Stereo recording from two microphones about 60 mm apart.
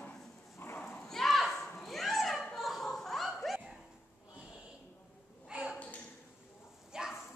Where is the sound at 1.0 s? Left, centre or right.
Centre.